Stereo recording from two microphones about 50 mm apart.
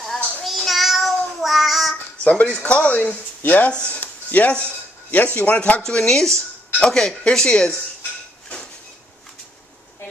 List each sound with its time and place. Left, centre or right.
0.0 s child singing: centre
2.1 s a sound: left
2.6 s speech: left
5.8 s speech: centre